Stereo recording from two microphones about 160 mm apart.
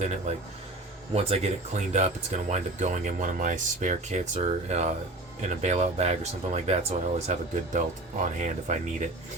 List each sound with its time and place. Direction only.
1.1 s speech: 40° right (ahead or behind)